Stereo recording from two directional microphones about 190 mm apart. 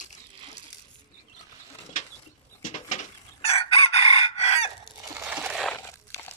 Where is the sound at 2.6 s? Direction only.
40° left (ahead or behind).